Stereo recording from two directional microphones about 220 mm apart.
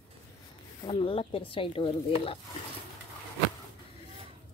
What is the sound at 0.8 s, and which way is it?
Speech, 25° left (ahead or behind).